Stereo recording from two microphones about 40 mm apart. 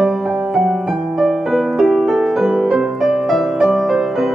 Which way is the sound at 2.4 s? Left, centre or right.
Centre.